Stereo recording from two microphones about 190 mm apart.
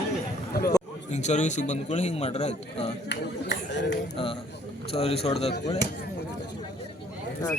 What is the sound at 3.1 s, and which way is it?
Speech, 65° left (ahead or behind).